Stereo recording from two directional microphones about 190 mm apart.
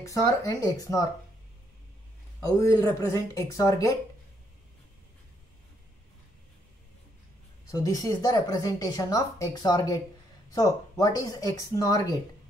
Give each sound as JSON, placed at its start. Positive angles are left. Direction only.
{"t": 0.0, "sound": "speech", "side_deg": 15}
{"t": 2.4, "sound": "speech", "side_deg": 15}
{"t": 7.7, "sound": "speech", "side_deg": 20}